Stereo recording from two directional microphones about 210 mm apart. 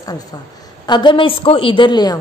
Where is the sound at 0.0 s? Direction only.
20° left (ahead or behind).